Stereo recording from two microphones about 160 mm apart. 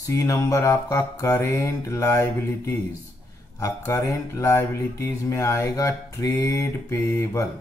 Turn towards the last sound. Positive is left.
turn(degrees=15)  # may be behind; listen again after turning